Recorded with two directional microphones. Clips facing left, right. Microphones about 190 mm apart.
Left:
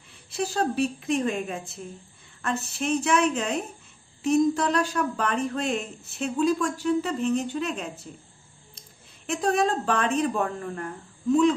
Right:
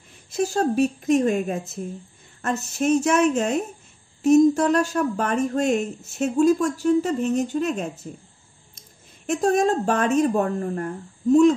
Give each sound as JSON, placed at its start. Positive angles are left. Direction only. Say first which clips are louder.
{"t": 0.3, "sound": "speech", "louder": "right 5 dB", "side_deg": -45}